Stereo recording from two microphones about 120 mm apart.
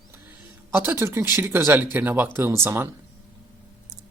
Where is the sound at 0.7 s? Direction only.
20° right (ahead or behind).